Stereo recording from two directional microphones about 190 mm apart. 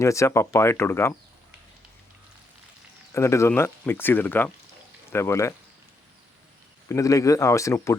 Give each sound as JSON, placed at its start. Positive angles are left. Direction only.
{"t": 0.0, "sound": "speech", "side_deg": 15}
{"t": 3.1, "sound": "speech", "side_deg": 15}
{"t": 6.8, "sound": "speech", "side_deg": 15}